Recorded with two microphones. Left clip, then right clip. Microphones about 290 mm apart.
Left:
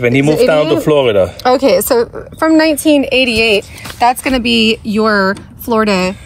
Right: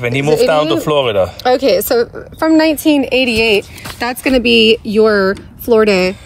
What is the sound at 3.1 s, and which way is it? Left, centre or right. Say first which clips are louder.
Speech: left 1 dB; left.